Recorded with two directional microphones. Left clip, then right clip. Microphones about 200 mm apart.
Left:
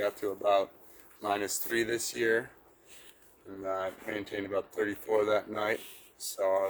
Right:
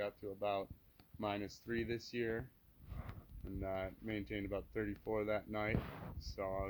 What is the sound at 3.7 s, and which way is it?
Speech, 25° right (ahead or behind).